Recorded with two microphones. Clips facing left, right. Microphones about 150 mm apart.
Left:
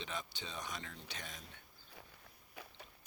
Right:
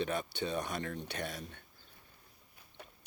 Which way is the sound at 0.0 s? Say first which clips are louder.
Right 10 dB; 60° right (ahead or behind).